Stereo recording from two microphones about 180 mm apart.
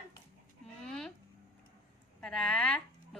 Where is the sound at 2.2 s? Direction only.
5° left (ahead or behind).